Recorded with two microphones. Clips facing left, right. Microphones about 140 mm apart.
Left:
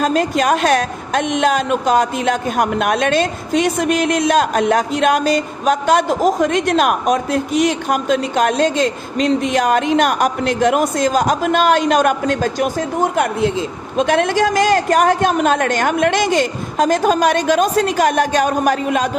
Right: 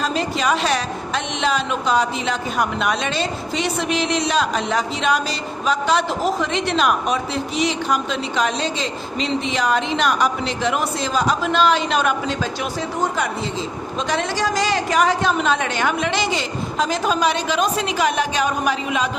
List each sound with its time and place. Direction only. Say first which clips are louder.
0.0 s a woman's voice: left 6 dB; 50° left (ahead or behind)